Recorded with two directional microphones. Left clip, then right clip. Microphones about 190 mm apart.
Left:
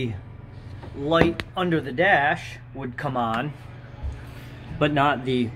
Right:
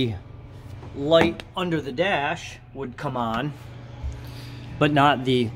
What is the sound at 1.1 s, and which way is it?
Speech, 15° right (ahead or behind).